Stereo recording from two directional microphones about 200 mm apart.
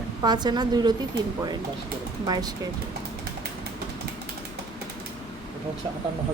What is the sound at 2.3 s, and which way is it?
Speech, 20° right (ahead or behind).